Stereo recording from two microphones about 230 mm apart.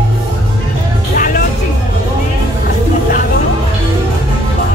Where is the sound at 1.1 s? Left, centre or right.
Left.